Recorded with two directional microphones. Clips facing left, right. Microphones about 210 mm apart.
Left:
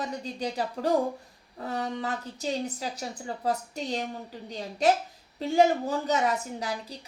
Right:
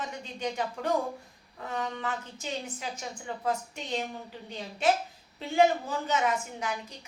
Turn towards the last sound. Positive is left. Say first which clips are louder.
# left 2 dB
turn(degrees=35)  # may be behind; listen again after turning